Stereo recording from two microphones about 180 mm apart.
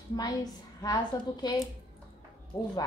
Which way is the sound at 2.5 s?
20° left (ahead or behind).